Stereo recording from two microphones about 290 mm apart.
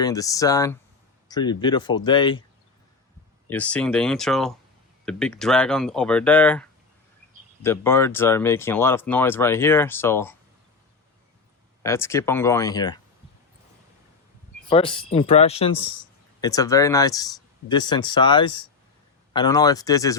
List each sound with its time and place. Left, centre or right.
0.0 s speech: centre
3.5 s speech: centre
11.8 s speech: centre
14.7 s speech: centre